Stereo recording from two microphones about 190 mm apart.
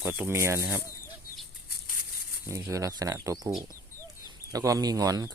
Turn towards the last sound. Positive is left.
turn(degrees=-20)  # may be behind; listen again after turning